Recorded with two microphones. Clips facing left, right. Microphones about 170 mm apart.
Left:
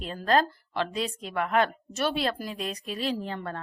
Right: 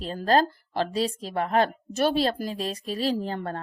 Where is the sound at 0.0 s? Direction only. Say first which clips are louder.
Right 2 dB; 35° right (ahead or behind).